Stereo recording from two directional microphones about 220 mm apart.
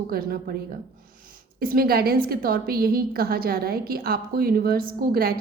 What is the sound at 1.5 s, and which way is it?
A woman's voice, 40° right (ahead or behind).